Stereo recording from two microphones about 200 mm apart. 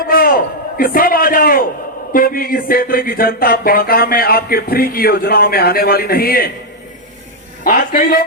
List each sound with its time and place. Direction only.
0.1 s a sound: 45° left (ahead or behind)
2.1 s speech: 45° left (ahead or behind)
7.6 s speech: 45° left (ahead or behind)